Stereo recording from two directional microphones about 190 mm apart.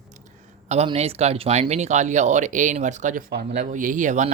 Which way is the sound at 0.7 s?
35° right (ahead or behind).